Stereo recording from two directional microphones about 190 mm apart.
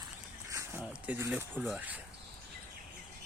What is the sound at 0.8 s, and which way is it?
Speech, 5° right (ahead or behind).